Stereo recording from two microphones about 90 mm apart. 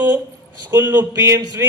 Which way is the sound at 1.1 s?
40° right (ahead or behind).